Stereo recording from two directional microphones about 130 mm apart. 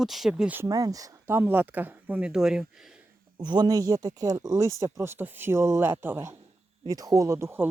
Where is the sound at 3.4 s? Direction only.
35° right (ahead or behind); by 6.4 s 15° right (ahead or behind).